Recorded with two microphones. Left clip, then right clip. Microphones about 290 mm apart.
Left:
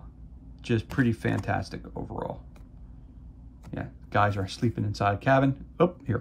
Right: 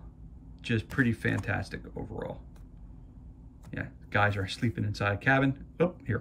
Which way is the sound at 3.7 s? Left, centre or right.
Centre.